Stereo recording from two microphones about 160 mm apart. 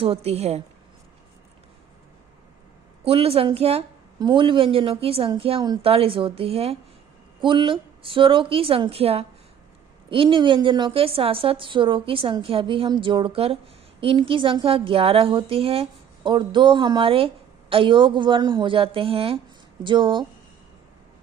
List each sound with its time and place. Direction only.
0.0 s a woman's voice: 40° right (ahead or behind)
3.0 s a woman's voice: 40° right (ahead or behind)